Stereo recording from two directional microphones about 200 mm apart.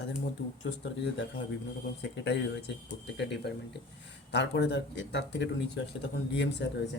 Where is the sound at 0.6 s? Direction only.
60° left (ahead or behind).